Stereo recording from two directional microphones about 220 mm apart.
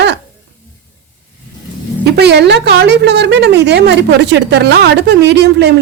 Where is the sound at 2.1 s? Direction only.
50° right (ahead or behind).